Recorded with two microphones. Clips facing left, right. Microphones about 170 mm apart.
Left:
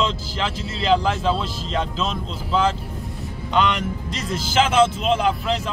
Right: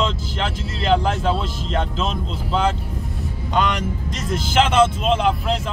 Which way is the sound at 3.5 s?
45° right (ahead or behind).